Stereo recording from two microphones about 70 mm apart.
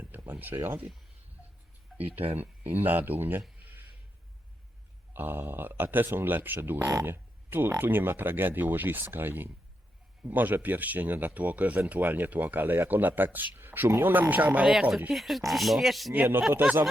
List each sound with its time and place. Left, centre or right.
0.0 s a sound: right
2.0 s speech: right
5.1 s speech: right
14.7 s speech: centre
15.1 s speech: centre
16.1 s speech: right